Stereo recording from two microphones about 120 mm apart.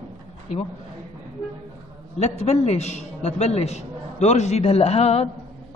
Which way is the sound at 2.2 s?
65° left (ahead or behind).